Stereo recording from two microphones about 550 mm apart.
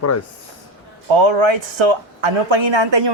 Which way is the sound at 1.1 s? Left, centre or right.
Right.